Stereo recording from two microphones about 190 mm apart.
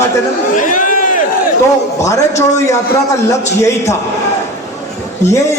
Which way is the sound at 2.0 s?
15° left (ahead or behind).